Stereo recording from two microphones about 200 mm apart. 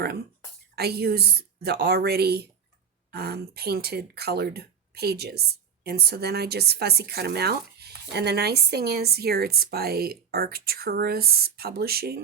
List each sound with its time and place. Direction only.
0.8 s speech: 55° right (ahead or behind)